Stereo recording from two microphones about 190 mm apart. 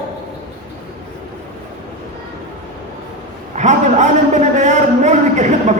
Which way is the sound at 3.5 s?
40° right (ahead or behind).